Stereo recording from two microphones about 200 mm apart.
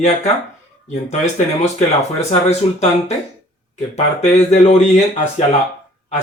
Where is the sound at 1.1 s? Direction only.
35° left (ahead or behind).